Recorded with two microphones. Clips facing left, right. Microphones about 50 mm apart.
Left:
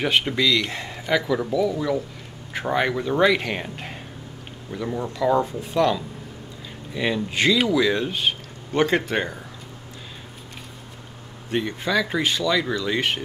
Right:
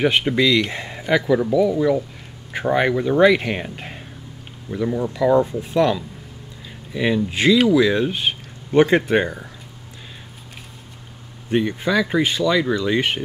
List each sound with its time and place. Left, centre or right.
0.0 s speech: centre
11.5 s speech: centre